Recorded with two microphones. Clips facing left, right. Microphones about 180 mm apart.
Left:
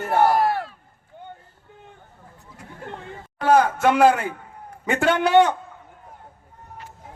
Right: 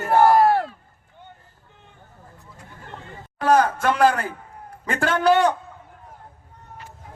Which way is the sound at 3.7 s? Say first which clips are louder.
Left 2 dB; 25° left (ahead or behind).